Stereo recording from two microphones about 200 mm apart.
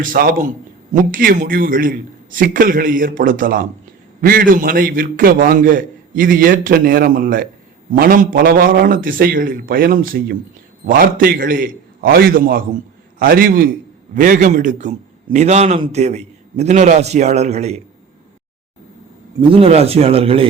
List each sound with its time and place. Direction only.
0.0 s a man's voice: 45° right (ahead or behind)
19.4 s a man's voice: 25° right (ahead or behind)